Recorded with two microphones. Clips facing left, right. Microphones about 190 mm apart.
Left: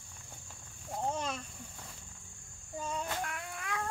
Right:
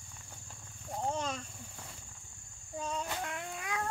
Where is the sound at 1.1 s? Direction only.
5° left (ahead or behind).